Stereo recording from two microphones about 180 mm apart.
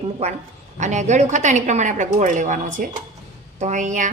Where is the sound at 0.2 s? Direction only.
35° right (ahead or behind).